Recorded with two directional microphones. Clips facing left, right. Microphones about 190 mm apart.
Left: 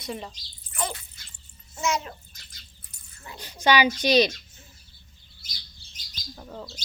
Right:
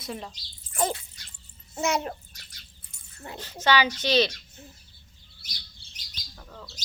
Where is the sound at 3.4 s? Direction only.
15° left (ahead or behind).